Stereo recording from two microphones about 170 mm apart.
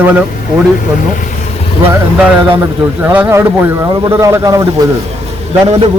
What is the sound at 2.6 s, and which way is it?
Speech, 10° right (ahead or behind).